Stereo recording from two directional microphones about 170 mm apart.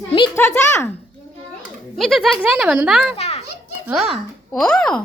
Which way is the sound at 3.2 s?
35° left (ahead or behind).